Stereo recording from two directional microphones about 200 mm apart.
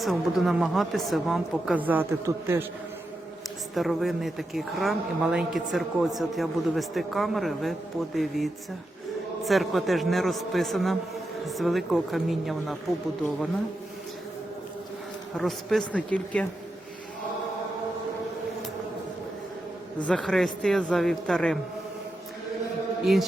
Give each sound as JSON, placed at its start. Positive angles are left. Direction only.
{"t": 0.0, "sound": "a woman's voice", "side_deg": 0}
{"t": 3.8, "sound": "a woman's voice", "side_deg": 0}
{"t": 15.4, "sound": "a woman's voice", "side_deg": 0}
{"t": 20.0, "sound": "a woman's voice", "side_deg": 5}